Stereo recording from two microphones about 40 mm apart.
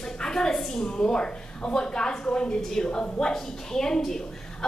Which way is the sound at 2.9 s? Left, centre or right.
Left.